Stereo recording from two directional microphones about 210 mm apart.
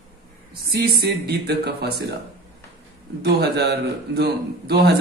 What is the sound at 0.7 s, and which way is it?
A man's voice, 50° right (ahead or behind).